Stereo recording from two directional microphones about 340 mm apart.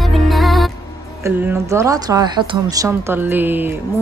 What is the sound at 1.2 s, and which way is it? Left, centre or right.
Speech, centre.